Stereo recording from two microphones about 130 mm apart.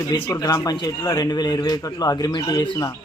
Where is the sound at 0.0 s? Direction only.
30° left (ahead or behind).